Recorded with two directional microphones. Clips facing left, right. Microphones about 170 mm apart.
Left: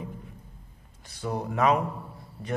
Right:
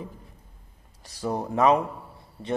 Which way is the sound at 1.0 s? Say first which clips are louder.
Right 3 dB; 35° right (ahead or behind).